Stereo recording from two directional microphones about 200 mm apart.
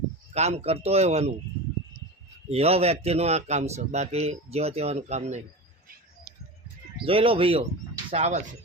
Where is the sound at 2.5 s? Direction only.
30° right (ahead or behind).